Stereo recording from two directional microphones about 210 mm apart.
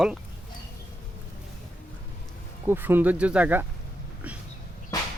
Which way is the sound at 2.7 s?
10° right (ahead or behind).